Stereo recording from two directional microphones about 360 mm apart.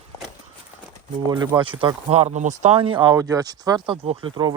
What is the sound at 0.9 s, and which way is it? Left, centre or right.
Speech, centre.